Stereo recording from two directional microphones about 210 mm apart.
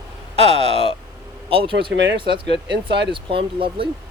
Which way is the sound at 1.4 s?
25° right (ahead or behind).